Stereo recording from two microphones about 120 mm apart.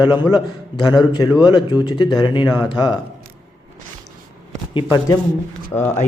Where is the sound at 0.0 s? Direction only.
40° left (ahead or behind).